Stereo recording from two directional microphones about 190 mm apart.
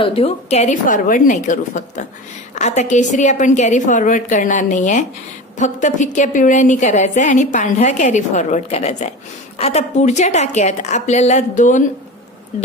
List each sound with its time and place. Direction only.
0.0 s a woman's voice: 30° left (ahead or behind)